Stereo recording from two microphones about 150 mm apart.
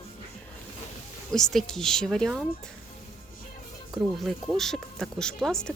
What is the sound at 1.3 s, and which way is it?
Speech, centre (ahead or behind).